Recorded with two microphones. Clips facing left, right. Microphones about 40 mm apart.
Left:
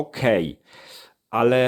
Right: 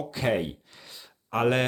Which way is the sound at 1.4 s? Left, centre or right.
Centre.